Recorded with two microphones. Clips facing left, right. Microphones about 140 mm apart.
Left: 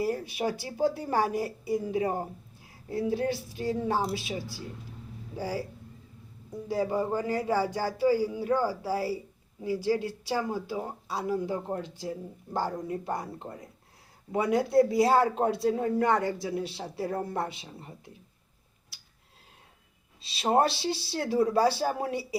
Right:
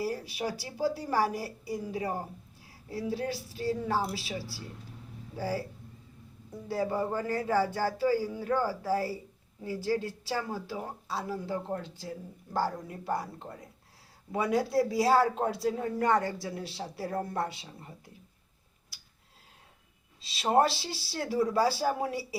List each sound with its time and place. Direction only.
0.0 s speech: 20° left (ahead or behind)
6.7 s speech: 15° left (ahead or behind)
20.3 s speech: 25° left (ahead or behind)